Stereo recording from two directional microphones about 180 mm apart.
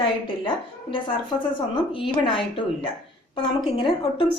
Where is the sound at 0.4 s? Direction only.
30° left (ahead or behind).